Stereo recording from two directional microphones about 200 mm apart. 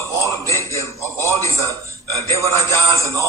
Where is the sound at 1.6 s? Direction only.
15° right (ahead or behind).